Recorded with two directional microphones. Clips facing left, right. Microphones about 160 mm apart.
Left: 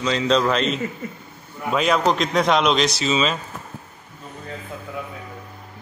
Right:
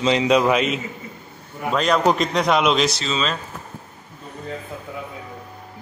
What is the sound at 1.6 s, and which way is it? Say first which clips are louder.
Speech: right 1 dB; 5° left (ahead or behind).